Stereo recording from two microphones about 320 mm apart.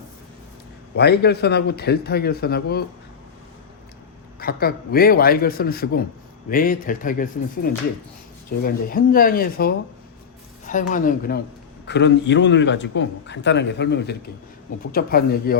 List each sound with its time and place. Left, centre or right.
0.9 s a man's voice: left
4.4 s a man's voice: left